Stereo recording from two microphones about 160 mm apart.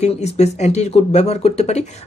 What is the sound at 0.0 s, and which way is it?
Speech, 45° left (ahead or behind).